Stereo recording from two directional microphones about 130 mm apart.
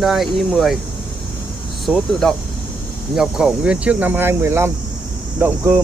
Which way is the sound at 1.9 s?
5° left (ahead or behind).